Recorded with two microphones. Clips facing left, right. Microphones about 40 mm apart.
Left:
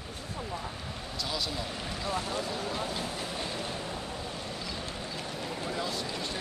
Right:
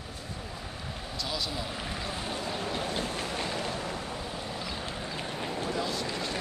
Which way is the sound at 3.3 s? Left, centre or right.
Right.